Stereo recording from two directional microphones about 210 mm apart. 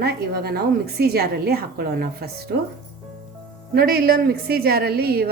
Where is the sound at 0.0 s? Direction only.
50° right (ahead or behind).